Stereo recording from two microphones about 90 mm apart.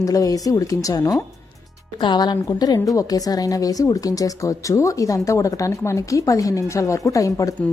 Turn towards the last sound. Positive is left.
turn(degrees=40)  # may be behind; listen again after turning